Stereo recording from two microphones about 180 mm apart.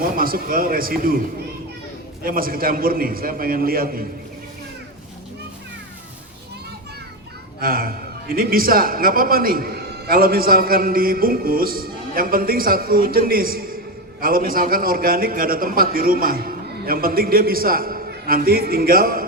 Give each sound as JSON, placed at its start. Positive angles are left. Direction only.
{"t": 0.2, "sound": "a man's voice", "side_deg": -55}
{"t": 2.2, "sound": "a man's voice", "side_deg": -55}
{"t": 7.6, "sound": "a man's voice", "side_deg": -55}